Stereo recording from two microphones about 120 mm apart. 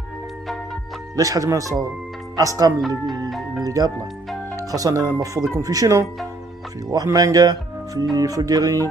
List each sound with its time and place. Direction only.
1.1 s speech: 30° right (ahead or behind)
3.3 s music: centre (ahead or behind)
3.6 s speech: 30° right (ahead or behind)